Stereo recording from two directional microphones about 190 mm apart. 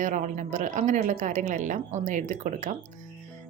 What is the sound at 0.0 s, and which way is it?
A woman's voice, 40° right (ahead or behind).